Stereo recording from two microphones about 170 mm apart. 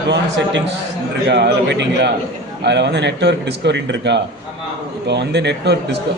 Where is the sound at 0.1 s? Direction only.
90° right.